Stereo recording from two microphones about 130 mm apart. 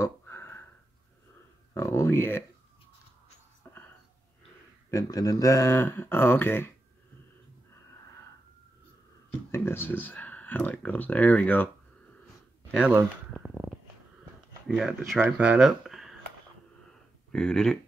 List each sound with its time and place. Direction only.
0.0 s a sound: 20° left (ahead or behind)
1.7 s speech: 20° left (ahead or behind)
4.9 s speech: 25° left (ahead or behind)
9.5 s speech: 15° left (ahead or behind)
13.3 s a sound: 5° right (ahead or behind)
14.7 s speech: 5° right (ahead or behind)
17.3 s speech: 5° left (ahead or behind)